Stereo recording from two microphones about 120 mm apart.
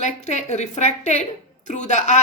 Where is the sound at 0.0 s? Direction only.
70° left (ahead or behind).